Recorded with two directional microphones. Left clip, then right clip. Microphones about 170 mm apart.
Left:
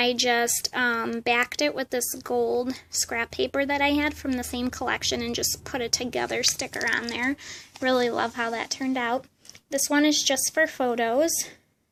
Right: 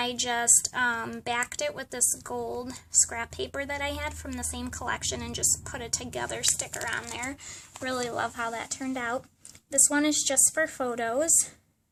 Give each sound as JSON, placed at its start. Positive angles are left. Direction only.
{"t": 0.0, "sound": "a woman's voice", "side_deg": 25}
{"t": 6.7, "sound": "a woman's voice", "side_deg": 35}